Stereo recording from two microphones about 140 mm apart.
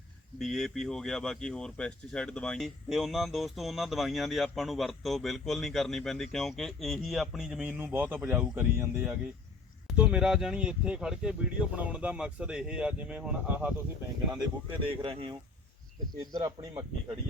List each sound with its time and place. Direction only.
0.3 s speech: centre (ahead or behind)
14.8 s speech: 40° right (ahead or behind)
16.3 s speech: 30° right (ahead or behind)